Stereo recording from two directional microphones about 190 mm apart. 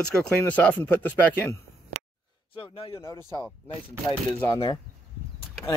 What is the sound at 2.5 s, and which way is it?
Speech, 30° left (ahead or behind).